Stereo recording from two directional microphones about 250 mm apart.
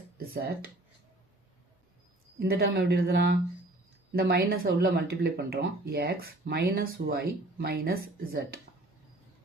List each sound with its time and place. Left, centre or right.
0.2 s speech: right
2.4 s speech: right